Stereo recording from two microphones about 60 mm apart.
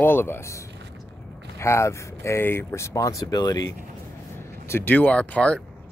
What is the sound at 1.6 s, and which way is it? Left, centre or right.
Speech, left.